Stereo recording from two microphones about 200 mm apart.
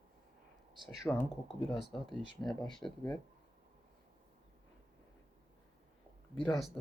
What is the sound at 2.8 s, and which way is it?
Speech, 10° left (ahead or behind).